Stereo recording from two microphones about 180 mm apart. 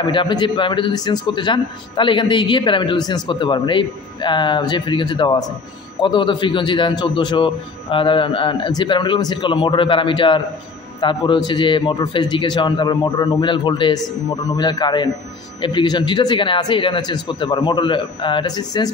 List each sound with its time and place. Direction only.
0.0 s a man's voice: 25° left (ahead or behind)